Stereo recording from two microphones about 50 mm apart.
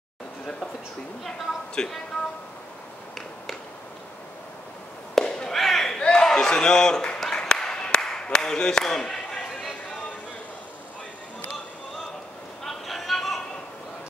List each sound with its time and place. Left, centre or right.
1.8 s a man's voice: centre
5.1 s fireworks: centre
5.6 s battle cry: centre
6.5 s a man's voice: centre
7.2 s a sound: centre
12.6 s a sound: centre